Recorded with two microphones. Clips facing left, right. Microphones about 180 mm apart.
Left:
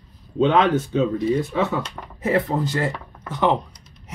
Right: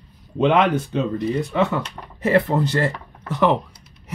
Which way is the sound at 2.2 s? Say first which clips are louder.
Right 3 dB; 75° right (ahead or behind).